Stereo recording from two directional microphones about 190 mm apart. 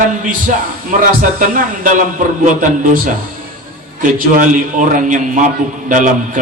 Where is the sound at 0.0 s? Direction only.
45° right (ahead or behind).